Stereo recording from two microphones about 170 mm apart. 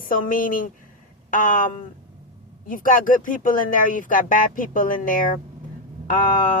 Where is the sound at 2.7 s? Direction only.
55° left (ahead or behind).